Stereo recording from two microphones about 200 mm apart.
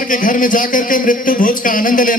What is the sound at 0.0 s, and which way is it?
Speech, 40° left (ahead or behind).